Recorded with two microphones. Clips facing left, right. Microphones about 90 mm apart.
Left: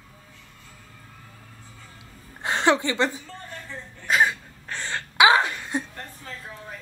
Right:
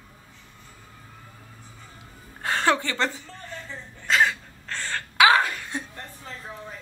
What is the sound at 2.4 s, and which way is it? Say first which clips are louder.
Chuckle: left 2 dB; 20° left (ahead or behind).